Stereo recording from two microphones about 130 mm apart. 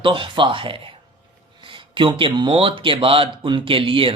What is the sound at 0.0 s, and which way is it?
Speech, 40° right (ahead or behind).